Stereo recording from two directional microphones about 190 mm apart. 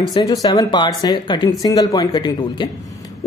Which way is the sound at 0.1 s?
20° left (ahead or behind).